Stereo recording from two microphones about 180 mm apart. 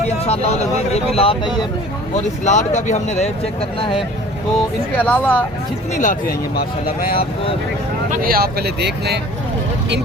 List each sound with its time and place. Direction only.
0.3 s speech: 35° left (ahead or behind)
2.4 s speech: 40° left (ahead or behind)
3.8 s speech: 30° left (ahead or behind)
4.9 s speech: 10° left (ahead or behind)
5.9 s speech: 45° left (ahead or behind)
8.2 s speech: 55° right (ahead or behind)